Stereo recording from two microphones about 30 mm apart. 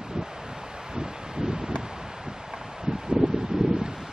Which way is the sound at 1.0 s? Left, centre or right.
Right.